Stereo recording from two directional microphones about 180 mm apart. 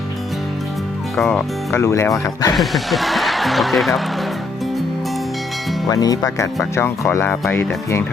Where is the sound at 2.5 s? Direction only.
Centre (ahead or behind).